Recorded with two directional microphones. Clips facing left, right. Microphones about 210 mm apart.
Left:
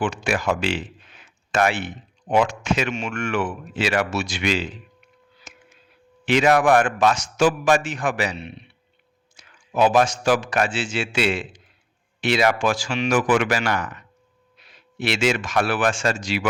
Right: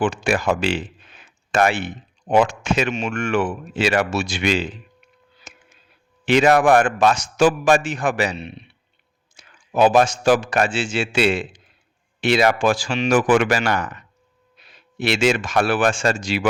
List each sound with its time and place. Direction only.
0.0 s a man's voice: 35° right (ahead or behind)
5.5 s a sound: 30° right (ahead or behind)
6.2 s a man's voice: 30° right (ahead or behind)
14.9 s speech: 30° right (ahead or behind)